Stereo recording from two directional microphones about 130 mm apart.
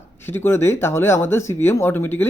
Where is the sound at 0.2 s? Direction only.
15° left (ahead or behind).